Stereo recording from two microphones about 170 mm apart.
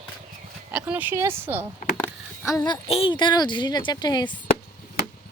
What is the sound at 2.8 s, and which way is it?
Speech, 35° left (ahead or behind).